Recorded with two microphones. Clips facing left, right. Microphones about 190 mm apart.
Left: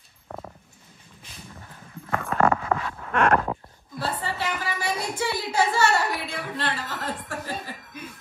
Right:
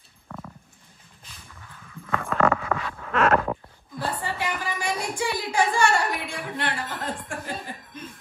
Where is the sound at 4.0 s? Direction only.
15° right (ahead or behind).